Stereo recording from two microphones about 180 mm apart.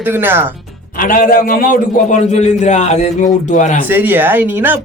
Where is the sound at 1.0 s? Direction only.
50° left (ahead or behind).